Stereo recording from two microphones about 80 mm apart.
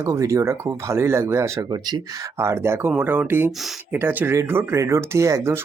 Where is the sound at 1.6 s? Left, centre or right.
Right.